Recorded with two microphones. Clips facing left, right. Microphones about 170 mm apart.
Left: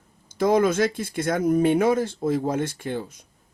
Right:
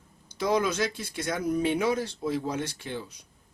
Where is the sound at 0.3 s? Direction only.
50° left (ahead or behind).